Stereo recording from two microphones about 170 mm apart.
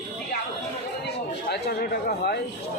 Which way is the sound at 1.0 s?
75° left (ahead or behind).